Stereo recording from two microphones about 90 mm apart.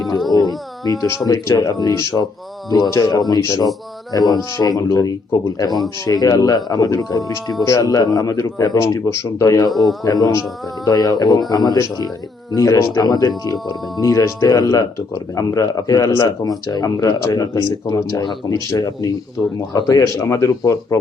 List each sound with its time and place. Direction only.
0.3 s a sound: 45° left (ahead or behind)
1.3 s speech: 40° left (ahead or behind)
18.2 s speech: 55° left (ahead or behind)
18.5 s speech: 40° left (ahead or behind)